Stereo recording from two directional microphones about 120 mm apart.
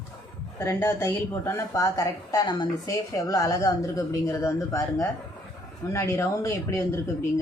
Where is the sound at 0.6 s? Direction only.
20° left (ahead or behind).